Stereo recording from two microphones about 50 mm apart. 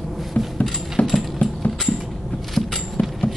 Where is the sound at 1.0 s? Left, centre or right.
Left.